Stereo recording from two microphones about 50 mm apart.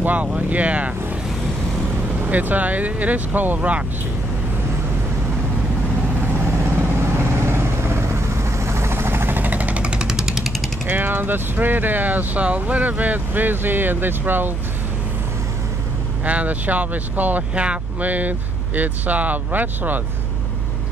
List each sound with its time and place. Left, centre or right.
0.0 s speech: right
2.2 s speech: right
6.4 s vehicle: right
9.8 s jackhammer: centre
10.9 s speech: right
16.3 s speech: right